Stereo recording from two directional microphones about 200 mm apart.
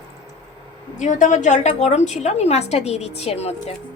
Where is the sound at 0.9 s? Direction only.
35° left (ahead or behind).